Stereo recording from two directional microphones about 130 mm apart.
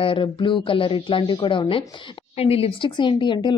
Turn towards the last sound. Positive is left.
turn(degrees=35)  # may be behind; listen again after turning